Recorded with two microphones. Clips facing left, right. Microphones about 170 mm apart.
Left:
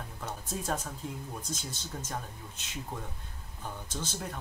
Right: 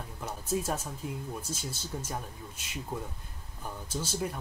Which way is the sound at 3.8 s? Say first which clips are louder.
Right 7 dB; 10° right (ahead or behind).